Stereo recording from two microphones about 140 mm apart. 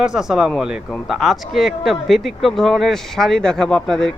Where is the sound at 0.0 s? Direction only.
5° right (ahead or behind).